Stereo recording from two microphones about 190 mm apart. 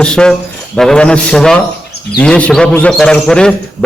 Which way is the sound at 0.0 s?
5° left (ahead or behind).